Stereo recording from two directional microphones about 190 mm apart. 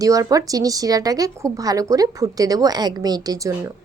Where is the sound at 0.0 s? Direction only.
20° right (ahead or behind).